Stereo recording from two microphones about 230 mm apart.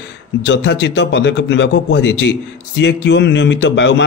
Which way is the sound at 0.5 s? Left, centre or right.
Left.